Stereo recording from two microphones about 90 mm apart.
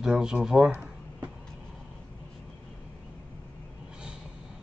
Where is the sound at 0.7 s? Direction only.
15° right (ahead or behind).